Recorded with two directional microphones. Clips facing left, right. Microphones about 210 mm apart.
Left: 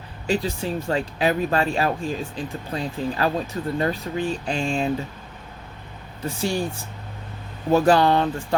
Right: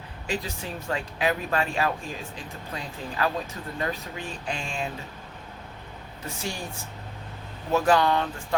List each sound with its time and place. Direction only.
0.3 s speech: 30° left (ahead or behind)
6.2 s speech: 30° left (ahead or behind)
7.7 s speech: 35° left (ahead or behind)